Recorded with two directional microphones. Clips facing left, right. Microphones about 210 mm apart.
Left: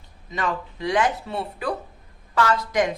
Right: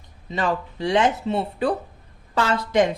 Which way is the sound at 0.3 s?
30° right (ahead or behind).